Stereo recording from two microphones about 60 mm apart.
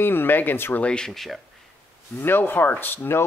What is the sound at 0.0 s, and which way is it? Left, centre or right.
Speech, left.